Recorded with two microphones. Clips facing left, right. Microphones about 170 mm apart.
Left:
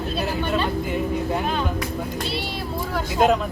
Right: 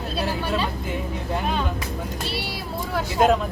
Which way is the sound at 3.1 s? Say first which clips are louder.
Even; centre (ahead or behind).